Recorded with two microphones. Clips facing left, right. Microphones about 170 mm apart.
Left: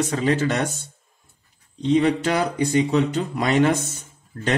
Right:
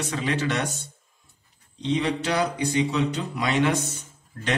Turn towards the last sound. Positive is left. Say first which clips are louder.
# left 4 dB
turn(degrees=45)  # may be behind; listen again after turning